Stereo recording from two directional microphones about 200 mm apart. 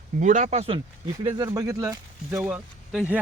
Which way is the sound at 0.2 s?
40° right (ahead or behind).